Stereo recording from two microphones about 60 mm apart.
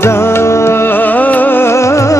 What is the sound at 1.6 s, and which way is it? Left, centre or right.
Music, left.